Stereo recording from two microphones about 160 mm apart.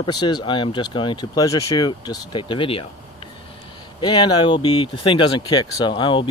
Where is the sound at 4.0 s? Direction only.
30° left (ahead or behind).